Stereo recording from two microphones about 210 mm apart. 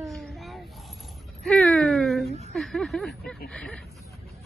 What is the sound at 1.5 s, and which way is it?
Speech, centre (ahead or behind).